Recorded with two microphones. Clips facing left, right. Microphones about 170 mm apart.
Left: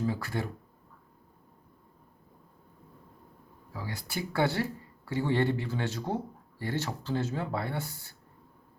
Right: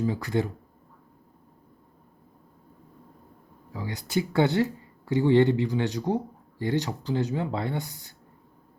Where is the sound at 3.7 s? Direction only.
20° right (ahead or behind).